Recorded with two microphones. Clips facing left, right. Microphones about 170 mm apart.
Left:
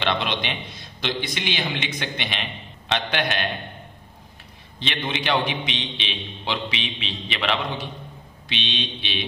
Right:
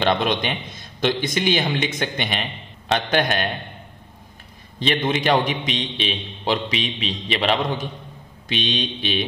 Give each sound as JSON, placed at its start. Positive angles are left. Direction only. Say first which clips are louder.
{"t": 0.0, "sound": "a man's voice", "louder": "right 5 dB", "side_deg": -45}
{"t": 4.7, "sound": "a man's voice", "louder": "right 7 dB", "side_deg": -40}